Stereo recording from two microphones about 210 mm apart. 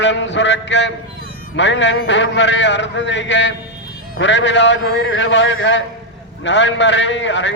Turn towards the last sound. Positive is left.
turn(degrees=60)  # may be behind; listen again after turning